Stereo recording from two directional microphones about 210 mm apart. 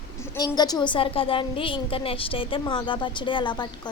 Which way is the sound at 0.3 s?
20° left (ahead or behind).